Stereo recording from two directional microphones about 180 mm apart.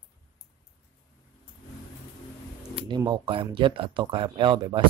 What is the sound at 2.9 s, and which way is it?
Speech, 25° right (ahead or behind).